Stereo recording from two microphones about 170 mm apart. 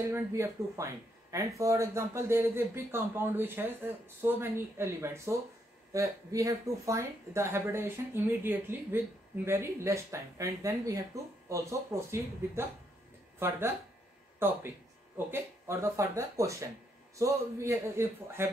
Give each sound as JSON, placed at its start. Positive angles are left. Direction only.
{"t": 0.1, "sound": "speech", "side_deg": -15}